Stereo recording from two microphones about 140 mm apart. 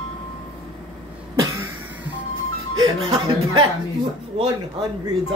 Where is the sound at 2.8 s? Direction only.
35° right (ahead or behind).